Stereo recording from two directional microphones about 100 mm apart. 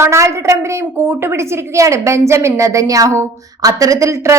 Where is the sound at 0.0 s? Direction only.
30° right (ahead or behind).